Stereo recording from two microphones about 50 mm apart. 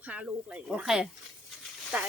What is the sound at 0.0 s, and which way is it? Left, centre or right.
Speech, right.